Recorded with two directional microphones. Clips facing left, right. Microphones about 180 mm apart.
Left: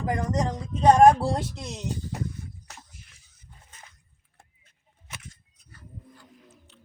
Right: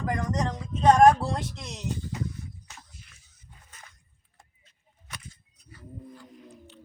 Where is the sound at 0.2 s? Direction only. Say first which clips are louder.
Left 2 dB; 25° left (ahead or behind).